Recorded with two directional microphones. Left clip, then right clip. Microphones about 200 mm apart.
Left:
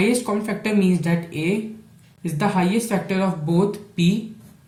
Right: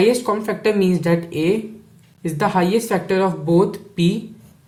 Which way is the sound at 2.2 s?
50° right (ahead or behind).